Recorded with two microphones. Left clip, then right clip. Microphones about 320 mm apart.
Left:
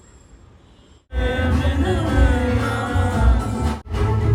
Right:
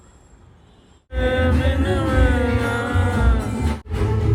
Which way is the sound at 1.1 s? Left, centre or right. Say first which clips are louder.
Right 3 dB; centre.